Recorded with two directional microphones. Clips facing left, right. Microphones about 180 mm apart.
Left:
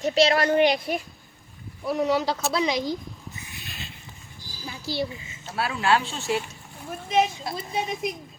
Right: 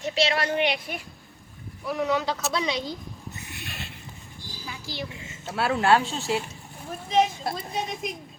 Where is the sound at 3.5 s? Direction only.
65° right (ahead or behind).